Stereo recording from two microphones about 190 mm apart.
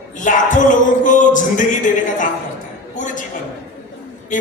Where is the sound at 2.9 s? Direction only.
40° left (ahead or behind).